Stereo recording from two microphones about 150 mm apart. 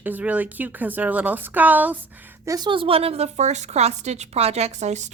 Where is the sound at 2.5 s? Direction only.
30° right (ahead or behind).